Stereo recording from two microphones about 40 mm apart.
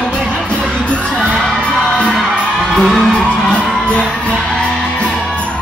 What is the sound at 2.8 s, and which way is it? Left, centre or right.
Music, centre.